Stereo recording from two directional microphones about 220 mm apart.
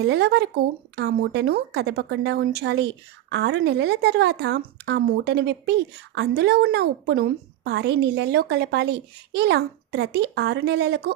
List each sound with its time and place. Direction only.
0.0 s speech: 50° right (ahead or behind)